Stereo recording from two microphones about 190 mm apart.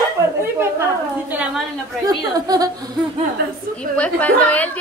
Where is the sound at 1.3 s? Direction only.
5° right (ahead or behind).